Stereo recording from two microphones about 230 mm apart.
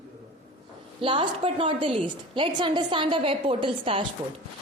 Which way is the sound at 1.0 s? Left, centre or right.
Right.